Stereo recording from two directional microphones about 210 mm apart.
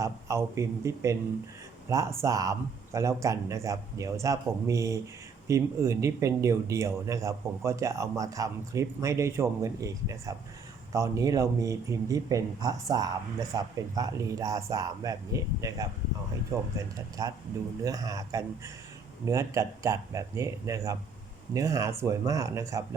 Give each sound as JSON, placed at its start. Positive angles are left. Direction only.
{"t": 0.0, "sound": "a man's voice", "side_deg": -15}